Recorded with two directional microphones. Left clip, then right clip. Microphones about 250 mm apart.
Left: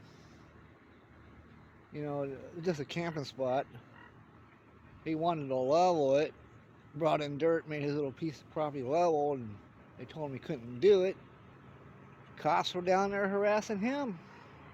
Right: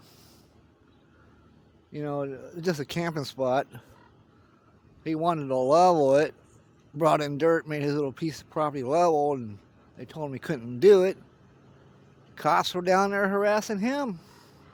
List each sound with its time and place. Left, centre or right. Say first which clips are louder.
1.9 s speech: right 6 dB; right
5.0 s speech: right 6 dB; right
12.3 s speech: right 7 dB; right